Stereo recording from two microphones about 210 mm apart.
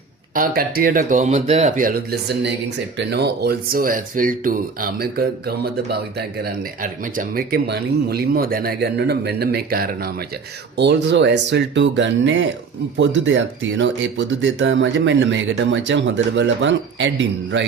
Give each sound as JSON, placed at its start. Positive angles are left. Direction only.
{"t": 0.3, "sound": "speech", "side_deg": -45}
{"t": 10.8, "sound": "speech", "side_deg": -55}